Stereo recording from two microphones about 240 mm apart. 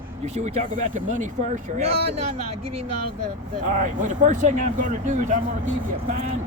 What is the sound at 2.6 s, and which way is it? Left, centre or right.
Speech, right.